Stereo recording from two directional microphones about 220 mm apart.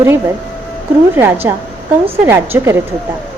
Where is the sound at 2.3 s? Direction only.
10° right (ahead or behind).